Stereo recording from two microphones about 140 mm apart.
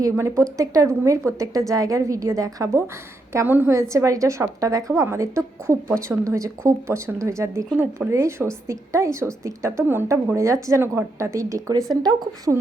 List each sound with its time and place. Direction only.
0.0 s a woman's voice: 20° right (ahead or behind)